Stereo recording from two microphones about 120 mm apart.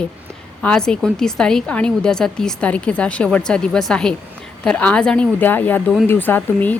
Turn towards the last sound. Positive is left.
turn(degrees=15)  # may be behind; listen again after turning